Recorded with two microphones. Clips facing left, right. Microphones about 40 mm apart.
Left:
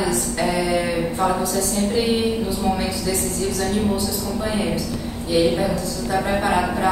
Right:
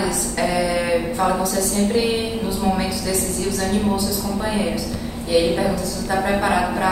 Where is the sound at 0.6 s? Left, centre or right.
Right.